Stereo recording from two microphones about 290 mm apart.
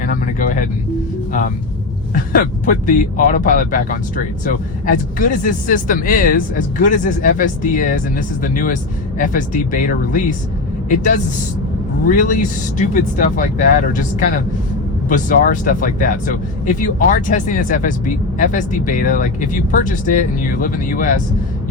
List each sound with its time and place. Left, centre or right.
0.0 s speech: left
2.1 s speech: left
5.1 s speech: left
12.0 s speech: left